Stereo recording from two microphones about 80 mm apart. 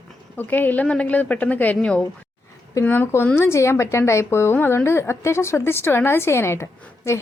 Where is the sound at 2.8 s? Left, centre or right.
Left.